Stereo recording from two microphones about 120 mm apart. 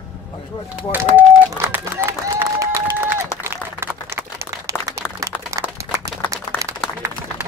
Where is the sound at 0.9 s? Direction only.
20° right (ahead or behind).